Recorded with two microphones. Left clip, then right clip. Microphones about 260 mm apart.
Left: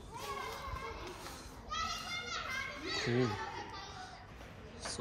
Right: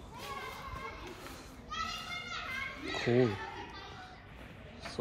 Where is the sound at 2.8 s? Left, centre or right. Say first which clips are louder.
Right 5 dB; centre.